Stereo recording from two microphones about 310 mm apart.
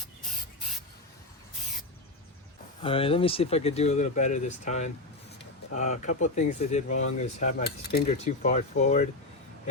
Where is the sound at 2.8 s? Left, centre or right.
Centre.